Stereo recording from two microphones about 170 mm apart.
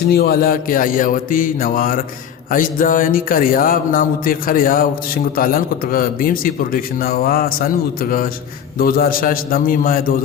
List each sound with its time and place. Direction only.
0.1 s music: 65° left (ahead or behind)